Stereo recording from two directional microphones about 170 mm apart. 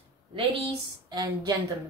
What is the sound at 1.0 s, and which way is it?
Speech, 25° right (ahead or behind).